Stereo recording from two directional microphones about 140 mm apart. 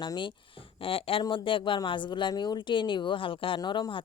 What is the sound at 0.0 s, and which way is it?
Speech, 35° left (ahead or behind).